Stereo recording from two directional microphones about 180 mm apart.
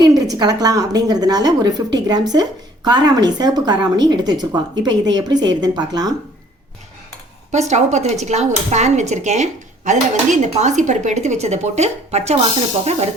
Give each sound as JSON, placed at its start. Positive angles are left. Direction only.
{"t": 0.0, "sound": "speech", "side_deg": -20}
{"t": 7.7, "sound": "speech", "side_deg": -40}